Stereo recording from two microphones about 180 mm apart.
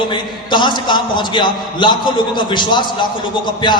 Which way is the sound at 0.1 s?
25° left (ahead or behind).